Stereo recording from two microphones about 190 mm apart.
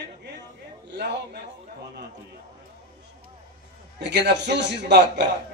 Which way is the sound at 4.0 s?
65° right (ahead or behind).